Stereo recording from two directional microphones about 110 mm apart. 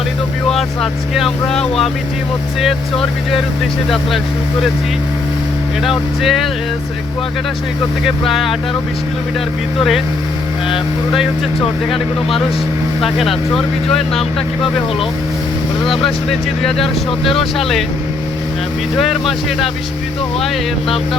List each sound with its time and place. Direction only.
0.4 s speech: 5° left (ahead or behind)
3.8 s speech: 5° left (ahead or behind)
5.8 s speech: centre (ahead or behind)
8.3 s speech: centre (ahead or behind)
13.0 s speech: centre (ahead or behind)
15.8 s speech: 55° left (ahead or behind)
16.3 s speech: centre (ahead or behind)
17.1 s speech: 55° left (ahead or behind)
17.6 s speech: centre (ahead or behind)